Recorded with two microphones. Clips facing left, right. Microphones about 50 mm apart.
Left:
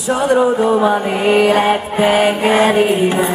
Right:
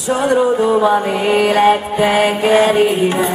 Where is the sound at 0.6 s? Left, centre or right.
Centre.